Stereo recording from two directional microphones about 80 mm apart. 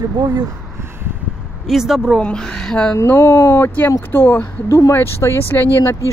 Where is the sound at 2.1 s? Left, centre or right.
Centre.